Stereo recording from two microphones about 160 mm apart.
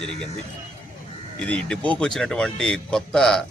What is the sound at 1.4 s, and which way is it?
A man's voice, 5° left (ahead or behind).